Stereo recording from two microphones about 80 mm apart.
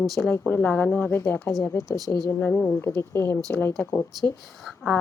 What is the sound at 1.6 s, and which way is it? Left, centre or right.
Speech, left.